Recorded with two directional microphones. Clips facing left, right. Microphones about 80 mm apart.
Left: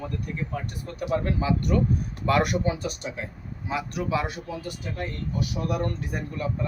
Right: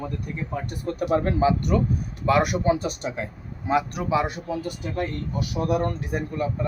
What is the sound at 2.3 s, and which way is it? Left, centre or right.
Speech, centre.